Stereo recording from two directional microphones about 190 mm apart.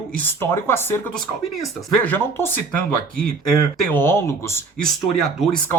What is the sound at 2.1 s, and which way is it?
Speech, 10° left (ahead or behind).